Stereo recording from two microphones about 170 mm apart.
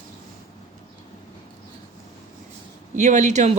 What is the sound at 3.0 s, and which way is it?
Speech, 45° right (ahead or behind).